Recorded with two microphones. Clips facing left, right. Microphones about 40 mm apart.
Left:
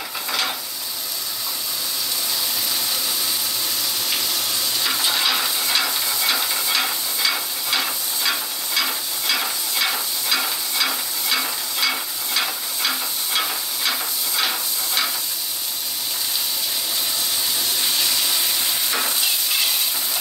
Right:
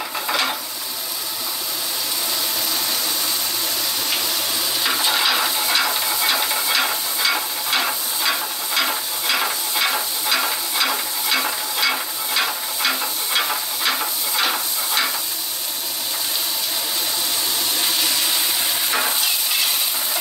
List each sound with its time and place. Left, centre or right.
0.3 s stir: centre
4.8 s stir: centre
17.7 s a sound: centre
18.9 s stir: centre